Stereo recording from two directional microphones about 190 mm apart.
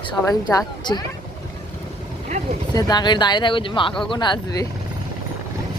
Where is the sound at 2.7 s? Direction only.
20° left (ahead or behind).